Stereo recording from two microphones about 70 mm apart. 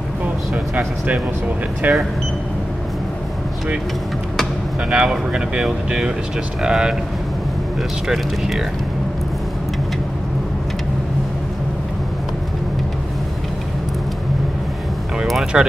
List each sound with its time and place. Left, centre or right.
1.8 s speech: right
4.9 s speech: centre
15.5 s speech: centre